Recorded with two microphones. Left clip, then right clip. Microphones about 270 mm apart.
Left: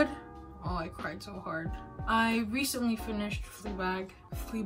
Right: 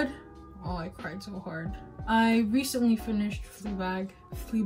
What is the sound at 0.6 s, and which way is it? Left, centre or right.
Speech, centre.